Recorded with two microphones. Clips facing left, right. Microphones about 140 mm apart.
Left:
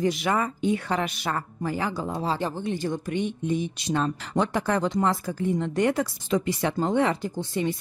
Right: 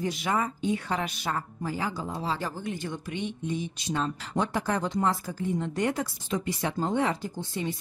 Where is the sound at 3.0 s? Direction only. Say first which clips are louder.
Left 5 dB; 50° left (ahead or behind).